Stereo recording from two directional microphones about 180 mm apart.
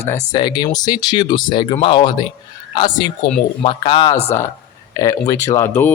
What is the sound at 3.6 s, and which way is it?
Speech, 30° left (ahead or behind).